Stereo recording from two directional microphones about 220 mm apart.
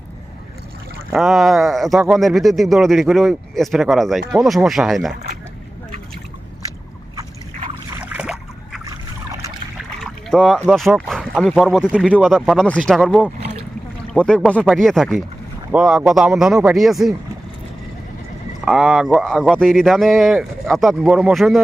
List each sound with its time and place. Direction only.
1.1 s speech: centre (ahead or behind)
7.2 s boat: 20° right (ahead or behind)
8.0 s boat: 5° right (ahead or behind)
10.0 s speech: centre (ahead or behind)
18.6 s speech: centre (ahead or behind)